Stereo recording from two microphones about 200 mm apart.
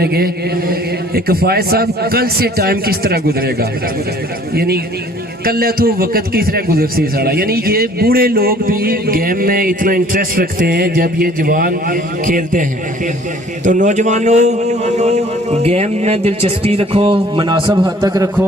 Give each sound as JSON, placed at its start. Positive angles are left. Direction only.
{"t": 0.0, "sound": "a man's voice", "side_deg": -50}
{"t": 13.7, "sound": "a man's voice", "side_deg": -40}